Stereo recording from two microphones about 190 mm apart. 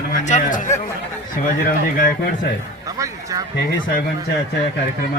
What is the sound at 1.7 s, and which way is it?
Speech, 45° left (ahead or behind).